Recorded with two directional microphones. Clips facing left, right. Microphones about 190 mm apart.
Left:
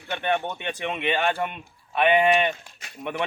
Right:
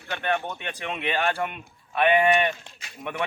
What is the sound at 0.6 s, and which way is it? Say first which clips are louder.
Speech: left 3 dB; centre (ahead or behind).